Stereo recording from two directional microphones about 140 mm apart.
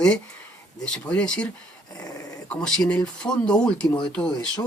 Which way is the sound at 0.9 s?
10° left (ahead or behind).